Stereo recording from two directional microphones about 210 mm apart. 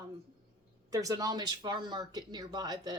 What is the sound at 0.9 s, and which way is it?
Speech, 15° right (ahead or behind).